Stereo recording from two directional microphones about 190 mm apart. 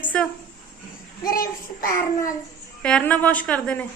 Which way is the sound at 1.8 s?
15° left (ahead or behind).